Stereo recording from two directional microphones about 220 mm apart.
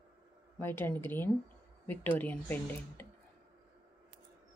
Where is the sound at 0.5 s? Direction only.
10° left (ahead or behind).